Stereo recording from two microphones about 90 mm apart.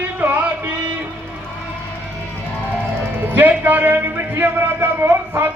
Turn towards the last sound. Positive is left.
turn(degrees=-25)  # may be behind; listen again after turning